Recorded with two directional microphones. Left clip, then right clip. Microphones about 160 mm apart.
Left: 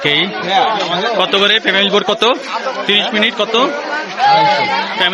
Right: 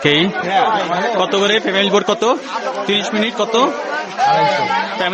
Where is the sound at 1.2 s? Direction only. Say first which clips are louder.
Left 4 dB; 20° right (ahead or behind).